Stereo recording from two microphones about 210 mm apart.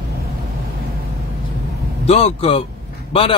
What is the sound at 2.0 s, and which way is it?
Speech, 30° left (ahead or behind).